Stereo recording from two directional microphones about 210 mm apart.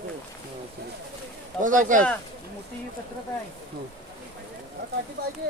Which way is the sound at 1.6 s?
40° right (ahead or behind).